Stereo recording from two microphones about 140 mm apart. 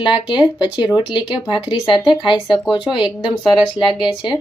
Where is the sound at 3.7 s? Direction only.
35° left (ahead or behind).